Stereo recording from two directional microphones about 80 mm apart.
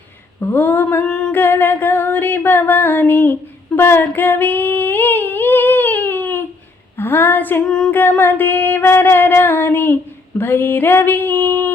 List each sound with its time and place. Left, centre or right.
0.3 s music: left
1.0 s singing: centre
1.3 s music: left
3.8 s female singing: left
6.9 s a woman's voice: left
7.9 s music: left